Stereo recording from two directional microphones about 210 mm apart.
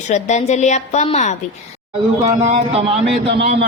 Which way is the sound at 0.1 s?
35° left (ahead or behind).